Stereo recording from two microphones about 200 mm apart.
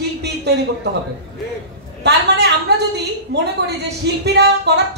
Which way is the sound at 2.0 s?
55° right (ahead or behind).